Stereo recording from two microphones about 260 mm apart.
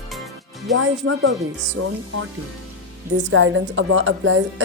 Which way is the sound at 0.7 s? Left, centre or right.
Right.